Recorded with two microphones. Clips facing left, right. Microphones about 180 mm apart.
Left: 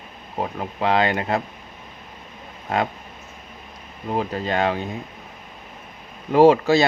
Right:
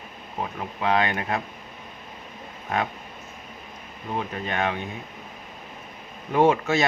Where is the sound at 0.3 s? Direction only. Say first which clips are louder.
Left 4 dB; 30° left (ahead or behind).